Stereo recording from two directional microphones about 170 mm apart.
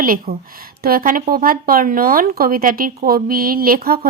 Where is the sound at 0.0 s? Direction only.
60° right (ahead or behind).